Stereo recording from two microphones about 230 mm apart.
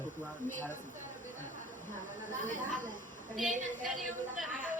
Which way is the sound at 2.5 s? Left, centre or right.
Right.